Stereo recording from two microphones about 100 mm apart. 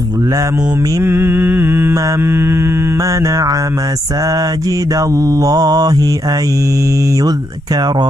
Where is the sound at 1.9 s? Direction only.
30° right (ahead or behind).